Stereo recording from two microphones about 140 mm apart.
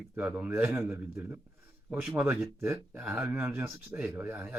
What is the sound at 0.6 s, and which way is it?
Speech, 20° right (ahead or behind).